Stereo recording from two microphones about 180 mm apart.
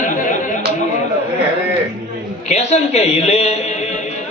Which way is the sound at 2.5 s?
40° left (ahead or behind).